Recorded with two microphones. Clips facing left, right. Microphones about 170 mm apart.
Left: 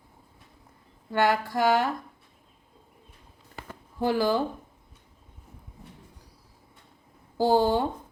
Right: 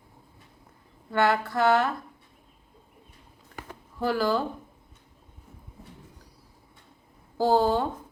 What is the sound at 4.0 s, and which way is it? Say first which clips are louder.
Speech: left 1 dB; 15° left (ahead or behind).